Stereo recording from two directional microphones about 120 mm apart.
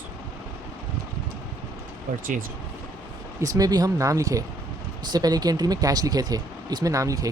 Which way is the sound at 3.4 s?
30° right (ahead or behind).